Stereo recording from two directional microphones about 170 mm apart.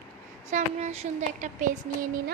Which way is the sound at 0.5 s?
40° right (ahead or behind).